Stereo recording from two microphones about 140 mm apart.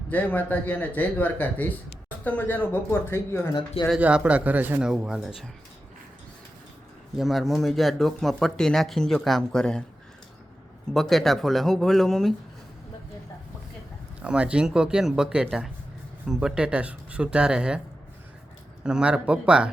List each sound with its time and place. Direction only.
0.1 s speech: 10° left (ahead or behind)
4.0 s speech: 10° right (ahead or behind)
7.2 s speech: centre (ahead or behind)
10.9 s speech: centre (ahead or behind)
14.2 s speech: 10° right (ahead or behind)
18.8 s speech: 5° right (ahead or behind)